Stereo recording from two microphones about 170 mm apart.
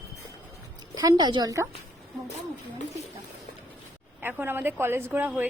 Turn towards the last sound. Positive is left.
turn(degrees=-15)  # may be behind; listen again after turning